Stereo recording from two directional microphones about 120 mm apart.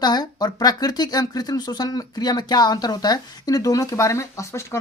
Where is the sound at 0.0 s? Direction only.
35° left (ahead or behind).